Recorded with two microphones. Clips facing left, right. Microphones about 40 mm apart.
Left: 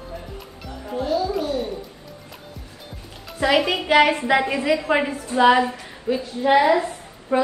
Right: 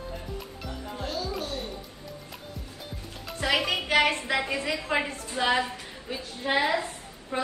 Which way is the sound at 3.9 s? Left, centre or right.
Left.